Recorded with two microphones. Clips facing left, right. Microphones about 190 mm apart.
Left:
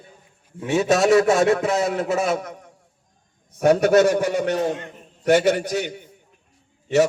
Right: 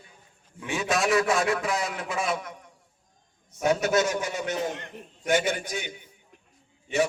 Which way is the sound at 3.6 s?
55° left (ahead or behind).